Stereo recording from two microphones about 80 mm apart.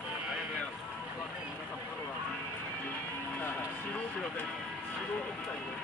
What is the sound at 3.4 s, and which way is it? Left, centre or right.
Music, left.